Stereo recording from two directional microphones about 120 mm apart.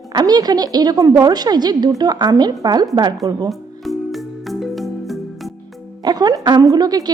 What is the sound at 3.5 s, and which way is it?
Music, centre (ahead or behind).